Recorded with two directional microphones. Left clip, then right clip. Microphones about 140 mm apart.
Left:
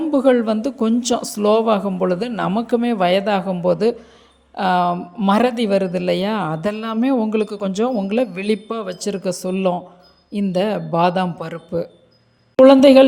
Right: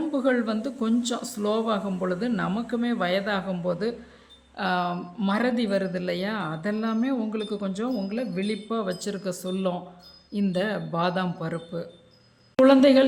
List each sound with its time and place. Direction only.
0.1 s a man's voice: 40° left (ahead or behind)
8.7 s a man's voice: 35° left (ahead or behind)